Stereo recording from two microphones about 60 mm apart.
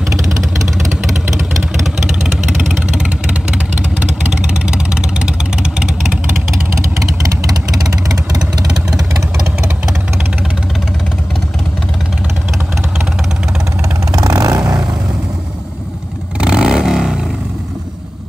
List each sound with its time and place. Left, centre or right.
4.6 s vehicle: centre
14.1 s vehicle: right
16.3 s vehicle: centre